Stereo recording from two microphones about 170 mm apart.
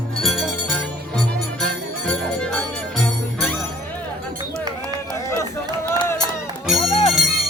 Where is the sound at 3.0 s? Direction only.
5° left (ahead or behind).